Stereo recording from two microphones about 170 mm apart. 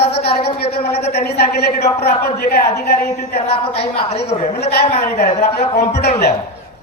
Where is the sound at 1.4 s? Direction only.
70° left (ahead or behind).